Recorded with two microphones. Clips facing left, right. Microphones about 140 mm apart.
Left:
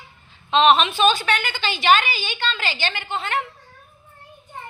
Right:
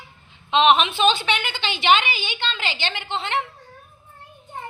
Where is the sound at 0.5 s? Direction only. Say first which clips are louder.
Left 1 dB; 15° right (ahead or behind).